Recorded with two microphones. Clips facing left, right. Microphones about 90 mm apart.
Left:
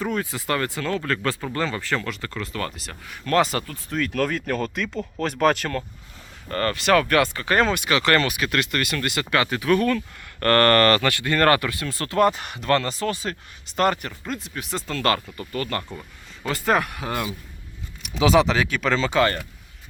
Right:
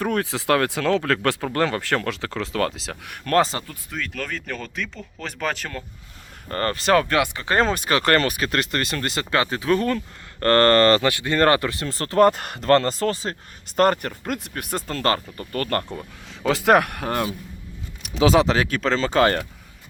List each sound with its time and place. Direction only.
0.0 s speech: 65° right (ahead or behind); by 3.2 s 85° right
3.5 s speech: 25° right (ahead or behind)
3.9 s speech: 5° left (ahead or behind)
6.5 s speech: 30° right (ahead or behind)
15.5 s speech: 55° right (ahead or behind)
16.4 s speech: 90° right; by 17.2 s 55° right (ahead or behind)
18.2 s speech: 35° right (ahead or behind)